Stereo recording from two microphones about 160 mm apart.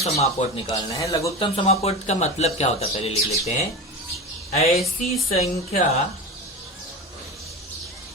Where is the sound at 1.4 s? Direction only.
35° left (ahead or behind).